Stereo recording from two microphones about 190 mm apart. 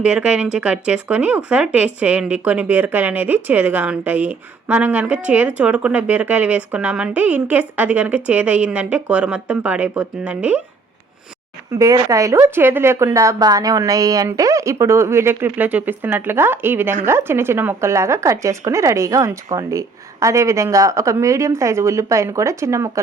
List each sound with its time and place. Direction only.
0.0 s speech: 5° right (ahead or behind)
11.7 s speech: 20° right (ahead or behind)